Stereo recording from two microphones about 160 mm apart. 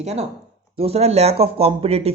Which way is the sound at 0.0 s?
40° right (ahead or behind).